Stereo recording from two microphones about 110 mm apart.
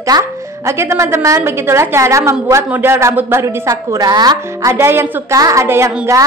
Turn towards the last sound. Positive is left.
turn(degrees=-25)  # may be behind; listen again after turning